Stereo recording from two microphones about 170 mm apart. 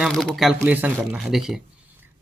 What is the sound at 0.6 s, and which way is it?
Speech, 10° right (ahead or behind).